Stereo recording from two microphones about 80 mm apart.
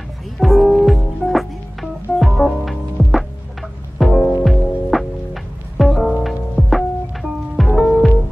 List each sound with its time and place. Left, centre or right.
0.4 s music: centre